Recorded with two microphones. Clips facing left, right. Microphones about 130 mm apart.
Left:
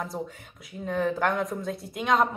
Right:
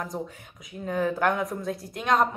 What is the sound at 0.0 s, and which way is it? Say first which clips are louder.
Speech: even; centre (ahead or behind).